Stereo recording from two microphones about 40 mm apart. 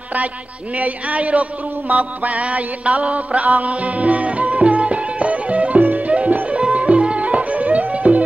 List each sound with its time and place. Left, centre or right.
0.7 s music: right